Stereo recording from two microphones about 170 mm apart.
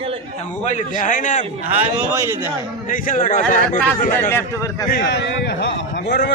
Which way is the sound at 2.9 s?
50° left (ahead or behind).